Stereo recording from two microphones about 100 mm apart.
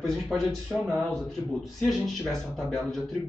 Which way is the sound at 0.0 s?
5° left (ahead or behind).